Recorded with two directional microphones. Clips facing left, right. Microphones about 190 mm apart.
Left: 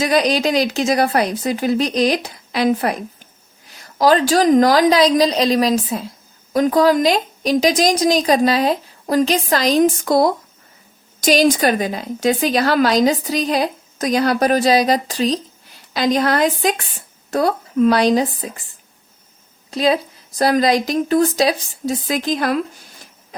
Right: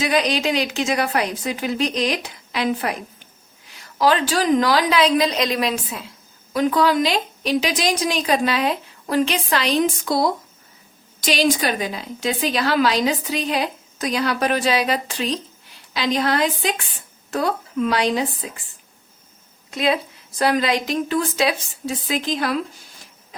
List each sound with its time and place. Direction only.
0.0 s a woman's voice: 40° left (ahead or behind)
19.7 s a woman's voice: 35° left (ahead or behind)